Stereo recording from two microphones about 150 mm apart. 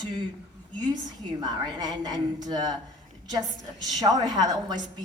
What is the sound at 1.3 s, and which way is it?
A woman's voice, 30° right (ahead or behind).